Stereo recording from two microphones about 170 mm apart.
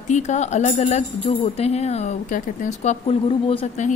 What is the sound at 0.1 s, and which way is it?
Speech, 45° left (ahead or behind).